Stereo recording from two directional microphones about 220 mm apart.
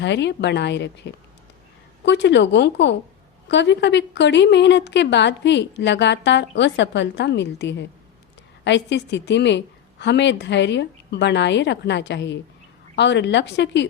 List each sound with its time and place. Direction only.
0.0 s a woman's voice: 50° left (ahead or behind)